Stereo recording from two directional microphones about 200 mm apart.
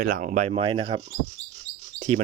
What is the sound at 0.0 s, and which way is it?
Speech, 40° right (ahead or behind).